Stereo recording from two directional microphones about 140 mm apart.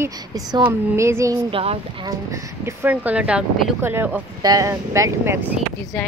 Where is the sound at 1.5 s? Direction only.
40° right (ahead or behind).